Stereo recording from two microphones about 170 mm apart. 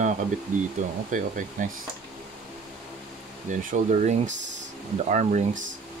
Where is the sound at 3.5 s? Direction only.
45° right (ahead or behind).